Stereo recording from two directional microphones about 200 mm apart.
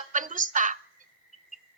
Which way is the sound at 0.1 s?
40° right (ahead or behind).